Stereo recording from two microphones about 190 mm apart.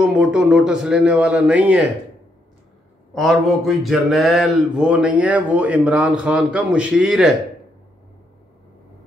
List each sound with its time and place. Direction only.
0.0 s speech: 5° right (ahead or behind)
3.2 s speech: centre (ahead or behind)